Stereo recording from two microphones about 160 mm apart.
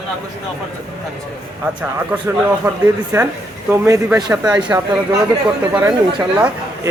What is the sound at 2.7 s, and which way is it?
Speech, 15° right (ahead or behind).